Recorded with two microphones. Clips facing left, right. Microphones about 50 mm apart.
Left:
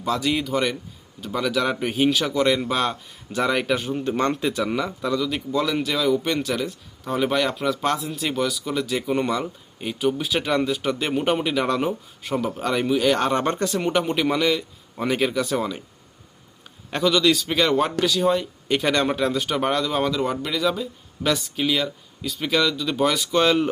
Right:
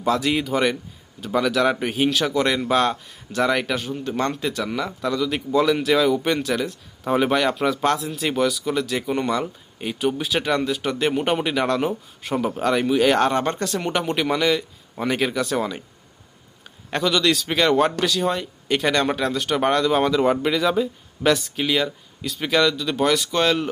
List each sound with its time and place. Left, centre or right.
0.0 s speech: centre
7.0 s speech: centre
7.3 s speech: centre
16.9 s speech: centre